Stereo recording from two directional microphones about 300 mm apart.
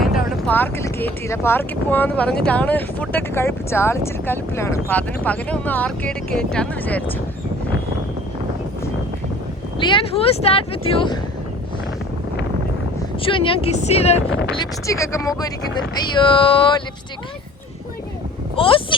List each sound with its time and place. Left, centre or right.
0.4 s speech: centre
9.7 s speech: centre
13.2 s speech: centre
14.6 s speech: centre
18.5 s speech: centre